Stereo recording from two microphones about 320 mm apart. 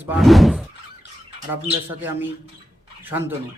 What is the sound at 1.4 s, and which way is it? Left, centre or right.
Speech, centre.